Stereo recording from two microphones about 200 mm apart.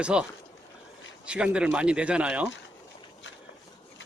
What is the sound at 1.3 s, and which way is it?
A man's voice, 5° right (ahead or behind).